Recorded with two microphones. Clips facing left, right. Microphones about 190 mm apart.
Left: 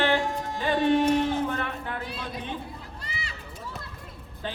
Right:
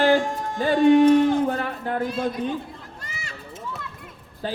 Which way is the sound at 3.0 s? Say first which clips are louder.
Even; 45° right (ahead or behind).